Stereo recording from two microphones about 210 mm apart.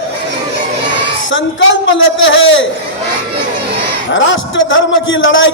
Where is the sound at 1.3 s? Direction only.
65° left (ahead or behind).